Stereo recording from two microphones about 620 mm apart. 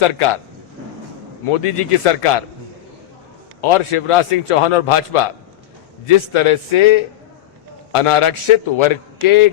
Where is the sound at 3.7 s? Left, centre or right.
Left.